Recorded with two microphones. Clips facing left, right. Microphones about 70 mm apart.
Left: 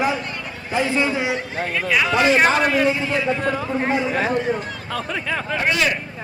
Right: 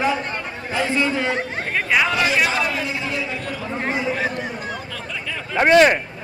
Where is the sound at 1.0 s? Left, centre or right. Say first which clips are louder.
Even; centre.